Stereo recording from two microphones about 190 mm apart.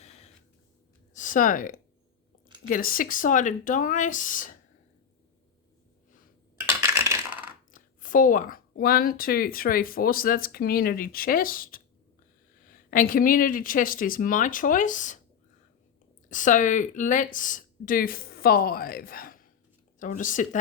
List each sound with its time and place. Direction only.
0.0 s a sound: 35° left (ahead or behind)
1.1 s speech: 45° left (ahead or behind)
6.7 s coin: 15° right (ahead or behind)
7.7 s speech: 45° left (ahead or behind)
16.3 s speech: 40° left (ahead or behind)